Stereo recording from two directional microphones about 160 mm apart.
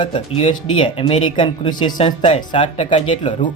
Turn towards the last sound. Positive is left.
turn(degrees=35)  # may be behind; listen again after turning